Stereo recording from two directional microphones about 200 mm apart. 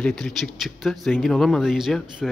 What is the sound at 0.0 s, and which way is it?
A man's voice, 5° left (ahead or behind).